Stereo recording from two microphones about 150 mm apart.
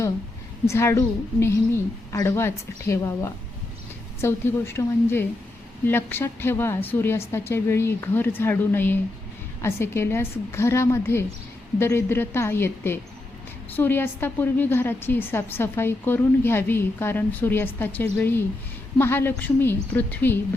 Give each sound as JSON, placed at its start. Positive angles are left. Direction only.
{"t": 0.7, "sound": "a woman's voice", "side_deg": 20}